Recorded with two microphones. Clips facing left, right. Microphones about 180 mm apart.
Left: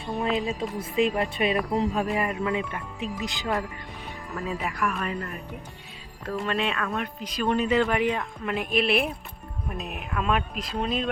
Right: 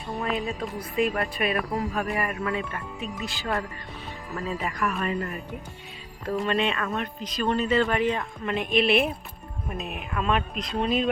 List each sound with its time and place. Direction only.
0.2 s speech: 25° left (ahead or behind)
4.4 s speech: 5° left (ahead or behind)
6.3 s speech: centre (ahead or behind)